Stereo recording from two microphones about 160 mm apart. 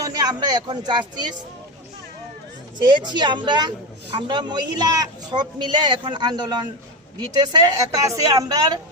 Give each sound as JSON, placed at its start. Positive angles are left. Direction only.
{"t": 0.0, "sound": "speech", "side_deg": -25}
{"t": 2.7, "sound": "a man's voice", "side_deg": -25}